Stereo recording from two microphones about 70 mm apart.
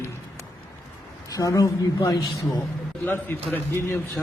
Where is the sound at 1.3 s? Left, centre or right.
Left.